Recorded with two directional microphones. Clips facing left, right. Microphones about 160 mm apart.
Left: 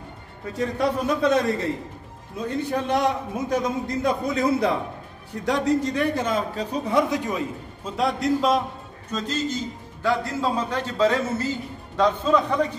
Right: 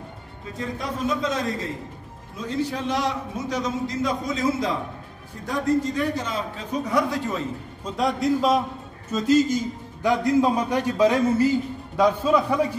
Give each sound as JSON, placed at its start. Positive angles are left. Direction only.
{"t": 0.7, "sound": "a man's voice", "side_deg": 65}
{"t": 2.4, "sound": "a man's voice", "side_deg": 55}
{"t": 5.4, "sound": "a man's voice", "side_deg": 75}
{"t": 6.5, "sound": "a man's voice", "side_deg": 35}